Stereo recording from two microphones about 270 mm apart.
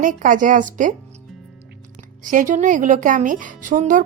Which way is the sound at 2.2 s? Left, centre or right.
Right.